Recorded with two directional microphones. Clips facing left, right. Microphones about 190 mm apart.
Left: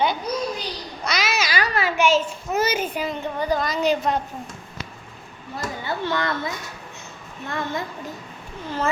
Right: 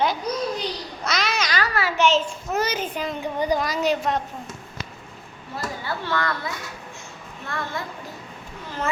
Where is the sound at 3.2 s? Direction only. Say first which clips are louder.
Right 2 dB; 15° right (ahead or behind).